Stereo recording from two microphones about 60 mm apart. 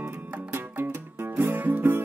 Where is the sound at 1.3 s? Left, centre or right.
Right.